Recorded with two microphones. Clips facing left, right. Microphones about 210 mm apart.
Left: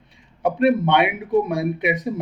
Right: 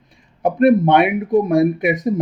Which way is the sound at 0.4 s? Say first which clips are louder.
Right 5 dB; 45° right (ahead or behind).